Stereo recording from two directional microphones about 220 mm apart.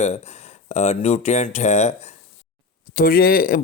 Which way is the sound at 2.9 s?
40° left (ahead or behind).